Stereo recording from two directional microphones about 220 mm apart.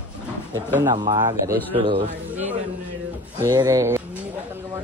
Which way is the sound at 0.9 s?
20° right (ahead or behind).